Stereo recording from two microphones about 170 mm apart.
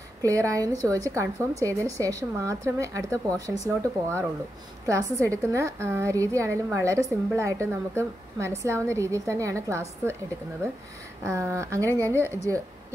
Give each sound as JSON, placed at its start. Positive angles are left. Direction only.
{"t": 0.2, "sound": "a woman's voice", "side_deg": -20}
{"t": 11.2, "sound": "a woman's voice", "side_deg": -15}